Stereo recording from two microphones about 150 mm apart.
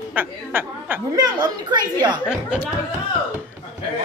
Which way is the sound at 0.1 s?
15° right (ahead or behind).